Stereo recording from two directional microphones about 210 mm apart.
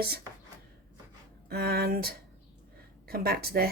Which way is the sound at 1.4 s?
50° right (ahead or behind).